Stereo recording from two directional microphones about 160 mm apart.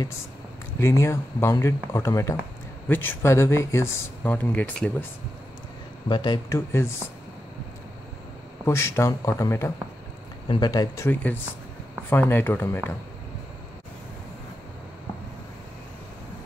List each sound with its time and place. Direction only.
0.7 s speech: 15° left (ahead or behind)
6.0 s speech: 30° left (ahead or behind)
8.6 s speech: 15° left (ahead or behind)